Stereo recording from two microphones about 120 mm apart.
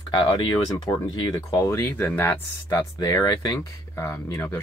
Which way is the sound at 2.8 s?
30° left (ahead or behind).